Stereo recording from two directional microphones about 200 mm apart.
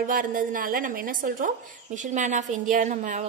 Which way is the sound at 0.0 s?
45° right (ahead or behind).